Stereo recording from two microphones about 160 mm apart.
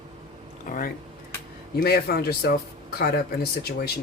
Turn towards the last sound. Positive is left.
turn(degrees=70)  # may be behind; listen again after turning